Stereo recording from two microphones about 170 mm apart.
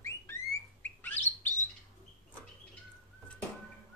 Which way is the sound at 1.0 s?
10° left (ahead or behind).